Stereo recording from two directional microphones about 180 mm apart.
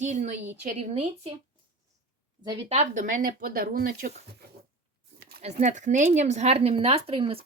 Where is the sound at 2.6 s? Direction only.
40° right (ahead or behind).